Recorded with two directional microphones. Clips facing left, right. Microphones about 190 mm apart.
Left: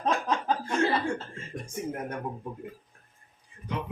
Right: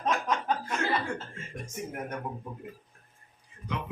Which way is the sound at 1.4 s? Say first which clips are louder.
Left 2 dB; 30° left (ahead or behind).